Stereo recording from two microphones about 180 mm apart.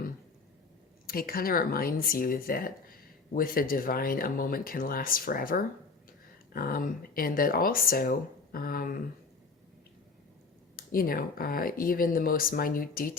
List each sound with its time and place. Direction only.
1.0 s speech: 55° left (ahead or behind)
10.8 s speech: 55° left (ahead or behind)